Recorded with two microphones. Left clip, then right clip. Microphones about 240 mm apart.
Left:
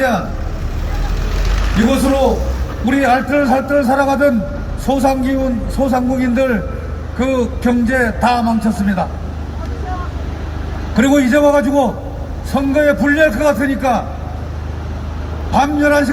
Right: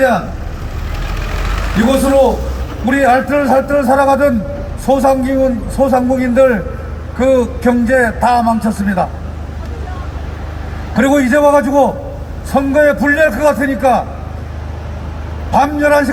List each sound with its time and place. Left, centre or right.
1.8 s speech: centre
10.9 s speech: centre
15.5 s speech: right